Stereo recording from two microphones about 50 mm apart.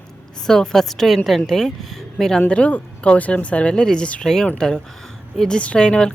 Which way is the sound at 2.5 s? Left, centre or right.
Left.